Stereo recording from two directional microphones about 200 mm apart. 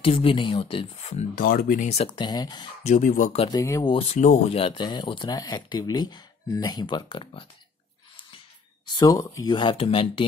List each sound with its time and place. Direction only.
0.0 s speech: 25° left (ahead or behind)
1.3 s speech: 45° left (ahead or behind); by 2.7 s 20° left (ahead or behind)
2.8 s speech: 40° left (ahead or behind)
3.4 s speech: 15° left (ahead or behind)
3.9 s speech: 30° left (ahead or behind)
8.8 s speech: 20° left (ahead or behind)